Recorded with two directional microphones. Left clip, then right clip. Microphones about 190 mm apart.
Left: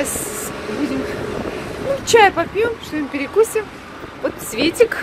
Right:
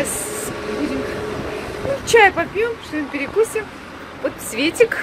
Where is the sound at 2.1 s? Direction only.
10° left (ahead or behind).